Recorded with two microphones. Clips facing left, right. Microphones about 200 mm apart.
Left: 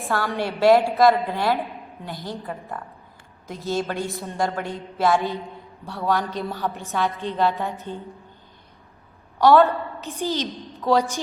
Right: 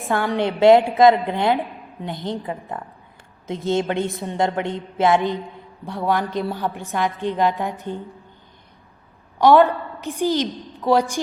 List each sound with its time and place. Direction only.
0.1 s a woman's voice: 15° right (ahead or behind)
9.4 s a woman's voice: 15° right (ahead or behind)